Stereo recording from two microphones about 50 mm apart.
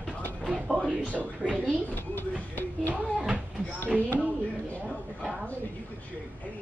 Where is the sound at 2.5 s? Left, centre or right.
Left.